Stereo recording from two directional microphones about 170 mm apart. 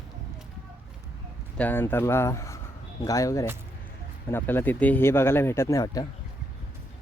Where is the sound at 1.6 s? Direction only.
10° left (ahead or behind).